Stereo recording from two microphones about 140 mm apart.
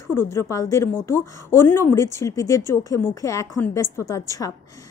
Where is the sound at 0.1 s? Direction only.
20° left (ahead or behind).